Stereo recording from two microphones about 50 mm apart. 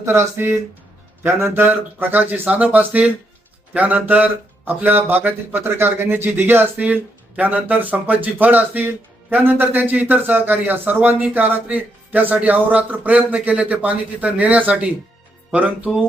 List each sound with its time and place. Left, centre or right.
0.0 s speech: right
1.5 s a man's voice: right